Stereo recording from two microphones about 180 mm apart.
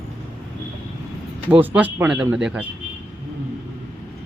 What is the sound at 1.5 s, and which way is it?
Speech, 10° right (ahead or behind).